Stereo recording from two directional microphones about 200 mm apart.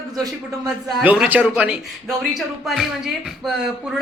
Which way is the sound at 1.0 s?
10° right (ahead or behind).